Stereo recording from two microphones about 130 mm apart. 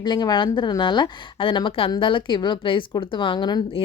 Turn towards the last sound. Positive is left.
turn(degrees=35)  # may be behind; listen again after turning